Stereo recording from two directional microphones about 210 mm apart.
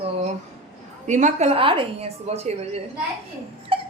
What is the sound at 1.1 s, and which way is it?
A woman's voice, 35° right (ahead or behind).